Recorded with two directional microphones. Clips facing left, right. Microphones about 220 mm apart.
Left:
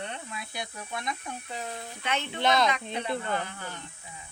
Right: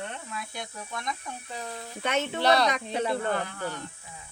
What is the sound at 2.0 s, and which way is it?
Speech, 45° right (ahead or behind).